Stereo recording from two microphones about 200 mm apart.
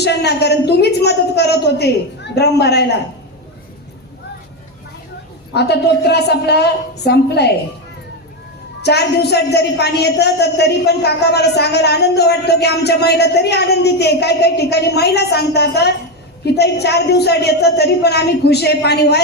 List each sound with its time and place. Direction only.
0.0 s a woman's voice: 55° left (ahead or behind)
5.5 s a woman's voice: 55° left (ahead or behind)
8.8 s a woman's voice: 55° left (ahead or behind)